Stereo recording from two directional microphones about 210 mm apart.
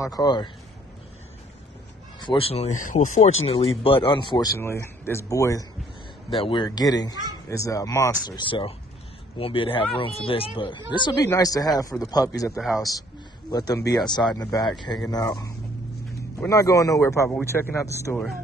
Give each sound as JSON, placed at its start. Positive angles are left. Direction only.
{"t": 0.0, "sound": "speech", "side_deg": 20}
{"t": 2.1, "sound": "speech", "side_deg": 25}
{"t": 3.4, "sound": "speech", "side_deg": 25}
{"t": 12.5, "sound": "speech", "side_deg": 0}
{"t": 13.5, "sound": "speech", "side_deg": 20}